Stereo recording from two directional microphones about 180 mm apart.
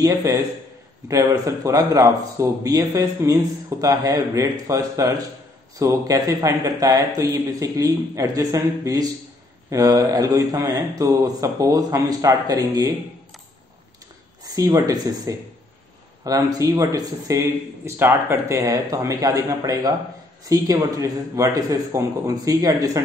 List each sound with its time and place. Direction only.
0.0 s a man's voice: 20° right (ahead or behind)
14.4 s a man's voice: 20° right (ahead or behind)